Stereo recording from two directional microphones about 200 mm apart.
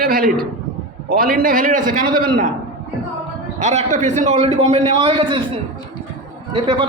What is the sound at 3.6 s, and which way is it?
A man's voice, 35° right (ahead or behind).